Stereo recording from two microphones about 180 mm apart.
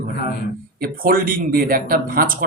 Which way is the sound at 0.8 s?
50° right (ahead or behind).